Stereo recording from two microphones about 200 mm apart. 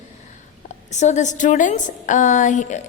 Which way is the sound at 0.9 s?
35° left (ahead or behind).